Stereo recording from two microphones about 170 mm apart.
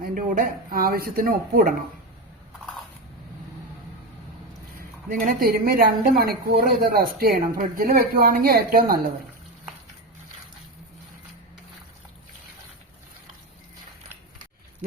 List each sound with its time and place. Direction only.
0.0 s a woman's voice: 50° right (ahead or behind)
4.8 s a woman's voice: 55° right (ahead or behind)